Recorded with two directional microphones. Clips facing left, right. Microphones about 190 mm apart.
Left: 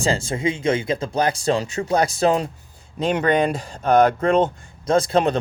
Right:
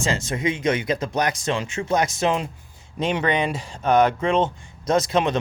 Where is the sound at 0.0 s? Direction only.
30° left (ahead or behind).